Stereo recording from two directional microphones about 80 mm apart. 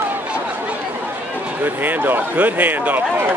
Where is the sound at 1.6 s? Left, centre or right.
Right.